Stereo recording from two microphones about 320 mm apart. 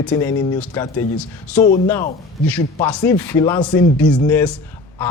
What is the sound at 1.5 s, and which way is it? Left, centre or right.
Speech, left.